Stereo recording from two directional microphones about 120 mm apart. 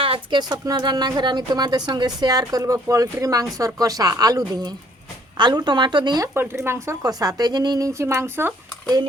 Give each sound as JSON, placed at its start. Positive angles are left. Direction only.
{"t": 0.0, "sound": "a woman's voice", "side_deg": -45}
{"t": 6.3, "sound": "a woman's voice", "side_deg": -20}